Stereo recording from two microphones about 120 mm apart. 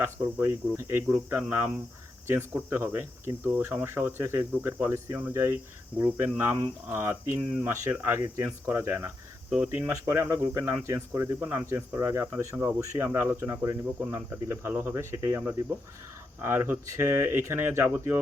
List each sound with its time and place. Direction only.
0.0 s speech: 20° right (ahead or behind)